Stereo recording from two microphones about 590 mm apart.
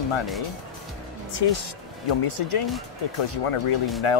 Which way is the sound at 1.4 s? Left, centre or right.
Left.